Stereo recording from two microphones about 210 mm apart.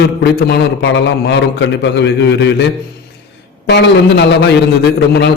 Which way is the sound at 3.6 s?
55° left (ahead or behind).